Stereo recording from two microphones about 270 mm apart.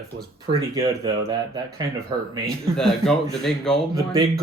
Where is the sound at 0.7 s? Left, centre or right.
Centre.